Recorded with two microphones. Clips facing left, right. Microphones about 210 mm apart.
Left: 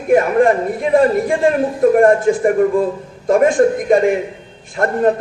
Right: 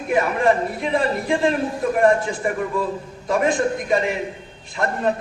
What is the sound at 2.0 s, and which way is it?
A man's voice, 50° left (ahead or behind).